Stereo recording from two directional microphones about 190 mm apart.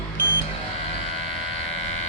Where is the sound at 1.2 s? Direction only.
30° left (ahead or behind).